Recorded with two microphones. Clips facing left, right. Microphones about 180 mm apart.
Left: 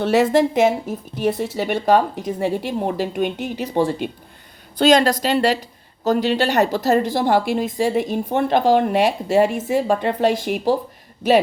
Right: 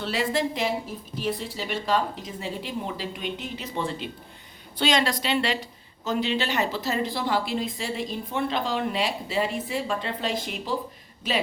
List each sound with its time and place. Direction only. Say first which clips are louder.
0.0 s a woman's voice: left 12 dB; 75° left (ahead or behind)
0.3 s a woman's voice: left 10 dB; 45° left (ahead or behind)
1.2 s speech: left 9 dB; 65° left (ahead or behind)
3.8 s a woman's voice: left 11 dB; 45° left (ahead or behind)
9.6 s a woman's voice: left 10 dB; 45° left (ahead or behind)